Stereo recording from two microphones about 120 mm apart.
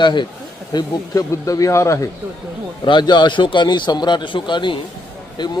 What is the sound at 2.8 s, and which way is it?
A man's voice, 40° left (ahead or behind).